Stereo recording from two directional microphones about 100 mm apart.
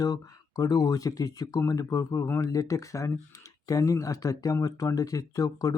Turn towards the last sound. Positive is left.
turn(degrees=35)  # may be behind; listen again after turning